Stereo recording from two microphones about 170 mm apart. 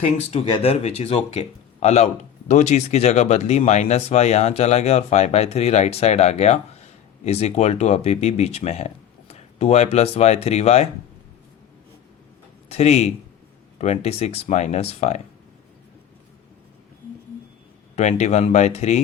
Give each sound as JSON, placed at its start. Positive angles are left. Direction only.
{"t": 0.3, "sound": "speech", "side_deg": 40}
{"t": 12.6, "sound": "speech", "side_deg": 40}
{"t": 17.9, "sound": "speech", "side_deg": 40}